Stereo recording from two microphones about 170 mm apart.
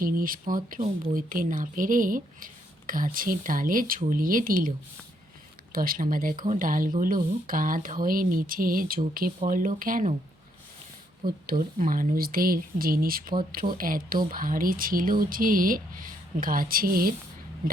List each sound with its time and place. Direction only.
0.0 s speech: 55° right (ahead or behind)
5.7 s speech: 55° right (ahead or behind)
11.4 s speech: 55° right (ahead or behind)